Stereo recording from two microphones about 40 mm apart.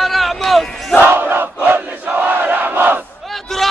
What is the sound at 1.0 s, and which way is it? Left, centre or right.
Battle cry, right.